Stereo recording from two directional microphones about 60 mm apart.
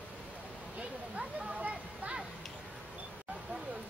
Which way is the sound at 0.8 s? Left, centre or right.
Centre.